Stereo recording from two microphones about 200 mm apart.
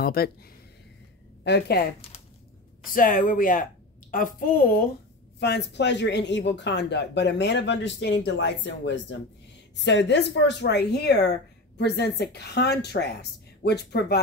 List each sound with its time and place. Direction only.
0.0 s speech: 50° left (ahead or behind)
1.4 s speech: 55° left (ahead or behind)
2.9 s speech: 45° left (ahead or behind)